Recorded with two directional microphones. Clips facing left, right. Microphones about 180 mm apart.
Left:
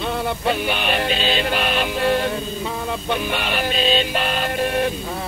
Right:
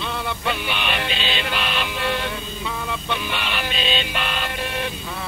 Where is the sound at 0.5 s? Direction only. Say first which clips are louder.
Left 4 dB; 40° left (ahead or behind).